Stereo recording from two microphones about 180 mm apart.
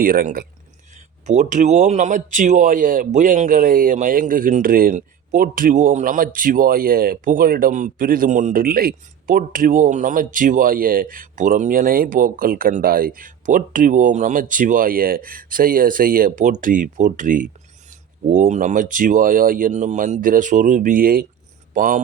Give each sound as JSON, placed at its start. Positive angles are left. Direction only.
{"t": 0.0, "sound": "a man's voice", "side_deg": -55}
{"t": 1.3, "sound": "a man's voice", "side_deg": -40}